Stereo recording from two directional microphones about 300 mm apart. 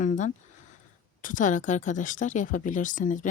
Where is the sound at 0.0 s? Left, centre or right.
Left.